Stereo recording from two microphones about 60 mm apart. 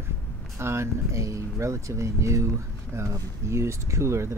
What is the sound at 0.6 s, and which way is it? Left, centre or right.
Speech, right.